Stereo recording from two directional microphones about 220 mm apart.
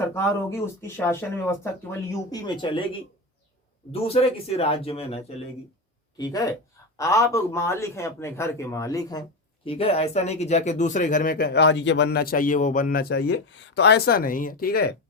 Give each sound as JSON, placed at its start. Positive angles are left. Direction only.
{"t": 0.1, "sound": "speech", "side_deg": 10}
{"t": 4.0, "sound": "speech", "side_deg": 25}
{"t": 6.1, "sound": "speech", "side_deg": 15}
{"t": 9.6, "sound": "speech", "side_deg": 25}
{"t": 13.2, "sound": "speech", "side_deg": 70}
{"t": 13.7, "sound": "speech", "side_deg": 50}